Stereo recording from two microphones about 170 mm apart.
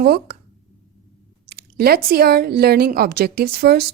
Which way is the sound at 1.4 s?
65° right (ahead or behind).